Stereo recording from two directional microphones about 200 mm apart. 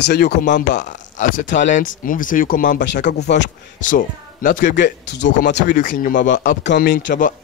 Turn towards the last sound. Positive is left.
turn(degrees=40)  # may be behind; listen again after turning